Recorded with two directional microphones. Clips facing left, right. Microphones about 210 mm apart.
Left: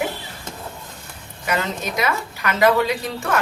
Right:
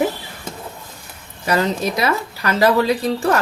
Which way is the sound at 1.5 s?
35° right (ahead or behind).